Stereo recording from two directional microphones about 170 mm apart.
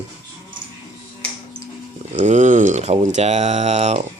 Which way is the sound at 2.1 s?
45° right (ahead or behind).